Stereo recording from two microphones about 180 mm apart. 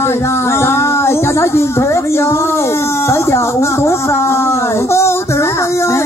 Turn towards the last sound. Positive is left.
turn(degrees=15)  # may be behind; listen again after turning